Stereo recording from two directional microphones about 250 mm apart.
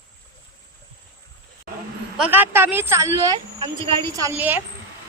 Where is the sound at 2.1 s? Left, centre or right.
Centre.